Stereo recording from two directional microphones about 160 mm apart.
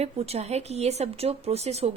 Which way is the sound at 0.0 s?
40° right (ahead or behind).